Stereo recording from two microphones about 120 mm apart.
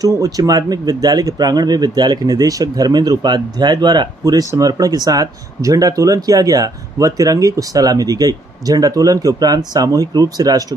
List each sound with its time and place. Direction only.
0.0 s speech: 30° right (ahead or behind)